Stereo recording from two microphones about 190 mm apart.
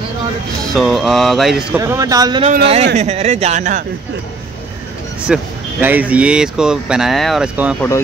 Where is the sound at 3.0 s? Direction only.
35° right (ahead or behind).